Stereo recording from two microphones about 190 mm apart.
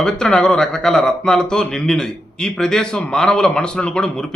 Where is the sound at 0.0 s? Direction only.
5° left (ahead or behind).